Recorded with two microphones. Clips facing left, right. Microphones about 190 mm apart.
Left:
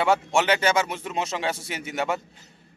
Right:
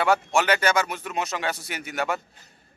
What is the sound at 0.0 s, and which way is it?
A man's voice, 25° left (ahead or behind).